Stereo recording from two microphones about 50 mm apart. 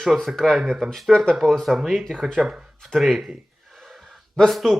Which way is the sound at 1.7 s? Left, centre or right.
Centre.